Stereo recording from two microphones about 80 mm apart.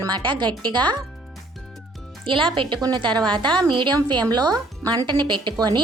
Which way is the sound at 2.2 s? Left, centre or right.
Right.